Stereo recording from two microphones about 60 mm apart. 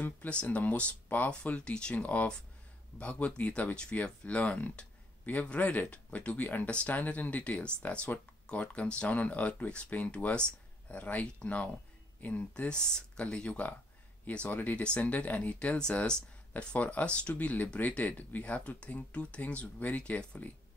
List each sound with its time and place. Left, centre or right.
0.3 s speech: left
14.5 s speech: left